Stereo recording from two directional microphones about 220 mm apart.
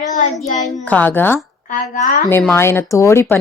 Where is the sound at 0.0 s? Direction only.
35° left (ahead or behind).